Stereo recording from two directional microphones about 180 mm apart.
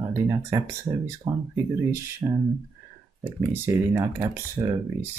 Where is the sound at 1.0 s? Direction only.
15° right (ahead or behind).